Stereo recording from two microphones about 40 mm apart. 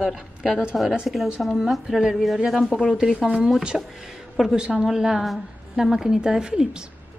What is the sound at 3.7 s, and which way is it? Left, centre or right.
Speech, centre.